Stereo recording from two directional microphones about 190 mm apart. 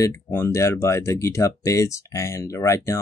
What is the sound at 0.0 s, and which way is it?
Speech, 15° left (ahead or behind).